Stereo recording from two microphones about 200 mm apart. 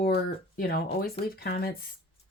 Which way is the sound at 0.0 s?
50° left (ahead or behind).